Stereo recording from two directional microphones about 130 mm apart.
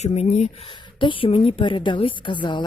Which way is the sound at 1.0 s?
40° left (ahead or behind).